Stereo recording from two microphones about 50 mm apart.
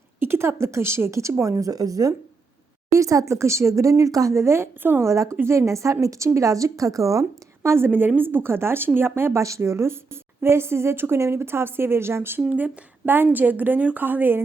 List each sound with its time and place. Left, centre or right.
0.2 s a woman's voice: right
2.9 s speech: right
4.8 s speech: right
5.0 s a woman's voice: right
7.9 s speech: right
9.4 s a woman's voice: right
12.5 s speech: right
13.1 s a woman's voice: right